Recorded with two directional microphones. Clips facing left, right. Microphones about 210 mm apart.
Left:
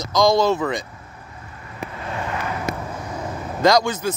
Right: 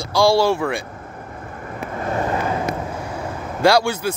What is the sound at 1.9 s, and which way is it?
Vehicle, 45° right (ahead or behind).